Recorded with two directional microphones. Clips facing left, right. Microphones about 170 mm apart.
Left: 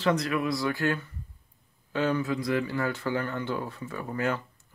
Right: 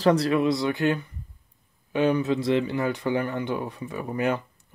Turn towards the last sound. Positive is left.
turn(degrees=-15)  # may be behind; listen again after turning